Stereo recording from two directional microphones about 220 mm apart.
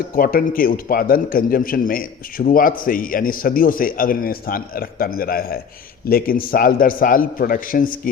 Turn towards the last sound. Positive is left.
turn(degrees=40)  # may be behind; listen again after turning